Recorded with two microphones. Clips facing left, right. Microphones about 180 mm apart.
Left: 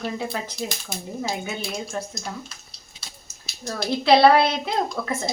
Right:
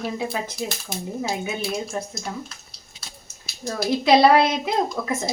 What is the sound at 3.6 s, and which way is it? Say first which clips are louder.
A woman's voice: right 2 dB; 5° right (ahead or behind).